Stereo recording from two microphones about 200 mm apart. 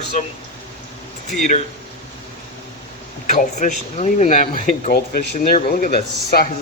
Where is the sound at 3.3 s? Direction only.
35° left (ahead or behind).